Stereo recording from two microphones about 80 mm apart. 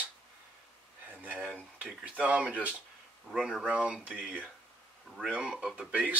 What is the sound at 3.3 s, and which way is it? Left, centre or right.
Speech, centre.